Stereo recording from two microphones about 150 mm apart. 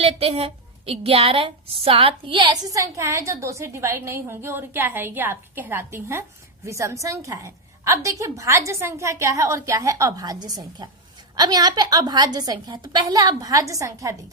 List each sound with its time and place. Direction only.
0.0 s a woman's voice: 40° right (ahead or behind)
2.6 s a woman's voice: 20° right (ahead or behind)